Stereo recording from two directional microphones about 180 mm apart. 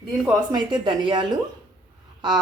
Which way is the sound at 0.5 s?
25° right (ahead or behind).